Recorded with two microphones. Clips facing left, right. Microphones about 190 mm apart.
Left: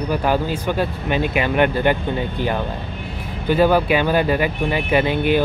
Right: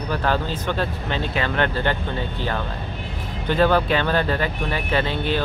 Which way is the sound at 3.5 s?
10° left (ahead or behind).